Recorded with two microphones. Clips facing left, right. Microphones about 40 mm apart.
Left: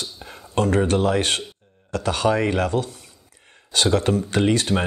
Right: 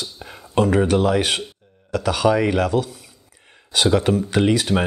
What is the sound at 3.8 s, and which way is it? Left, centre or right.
Speech, centre.